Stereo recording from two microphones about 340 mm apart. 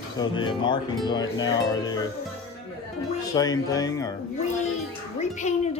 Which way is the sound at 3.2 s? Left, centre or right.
Centre.